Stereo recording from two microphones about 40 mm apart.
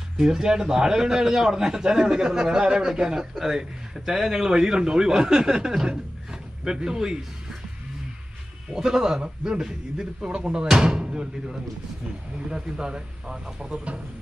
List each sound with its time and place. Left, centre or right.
0.2 s a man's voice: centre
8.7 s a man's voice: centre